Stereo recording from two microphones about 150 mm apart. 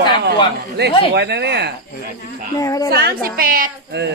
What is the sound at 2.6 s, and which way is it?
Speech, 20° left (ahead or behind).